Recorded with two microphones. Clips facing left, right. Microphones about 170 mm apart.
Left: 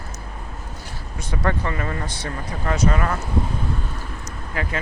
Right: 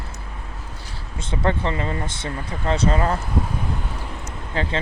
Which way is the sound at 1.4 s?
25° right (ahead or behind).